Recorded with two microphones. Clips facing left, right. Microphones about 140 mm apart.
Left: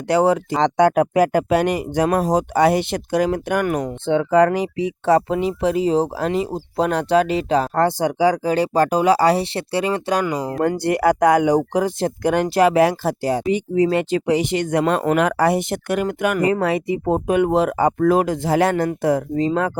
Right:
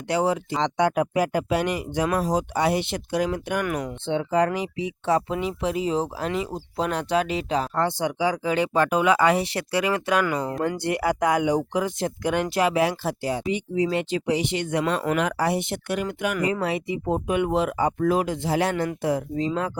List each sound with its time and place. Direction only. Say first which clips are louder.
0.1 s speech: left 7 dB; 45° left (ahead or behind)
4.5 s speech: left 6 dB; 40° left (ahead or behind)
10.6 s speech: left 10 dB; 45° left (ahead or behind)